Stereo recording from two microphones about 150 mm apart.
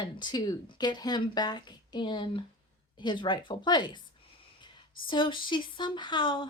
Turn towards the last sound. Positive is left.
turn(degrees=35)  # may be behind; listen again after turning